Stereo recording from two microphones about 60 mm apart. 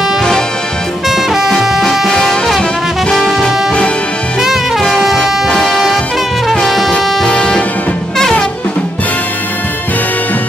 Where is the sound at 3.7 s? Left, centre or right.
Centre.